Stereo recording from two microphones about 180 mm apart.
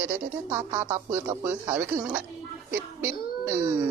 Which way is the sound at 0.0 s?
15° right (ahead or behind).